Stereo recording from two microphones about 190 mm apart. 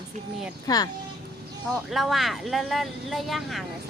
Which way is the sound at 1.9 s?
Centre (ahead or behind).